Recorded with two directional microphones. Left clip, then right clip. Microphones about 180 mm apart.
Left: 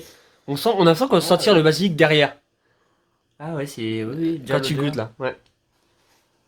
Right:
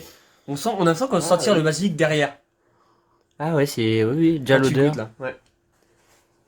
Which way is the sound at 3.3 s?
55° right (ahead or behind).